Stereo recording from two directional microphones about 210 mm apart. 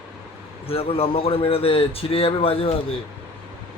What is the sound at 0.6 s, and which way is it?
Speech, 25° left (ahead or behind).